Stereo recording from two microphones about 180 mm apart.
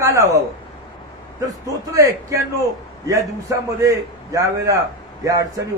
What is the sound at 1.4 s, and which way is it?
A man's voice, 20° right (ahead or behind).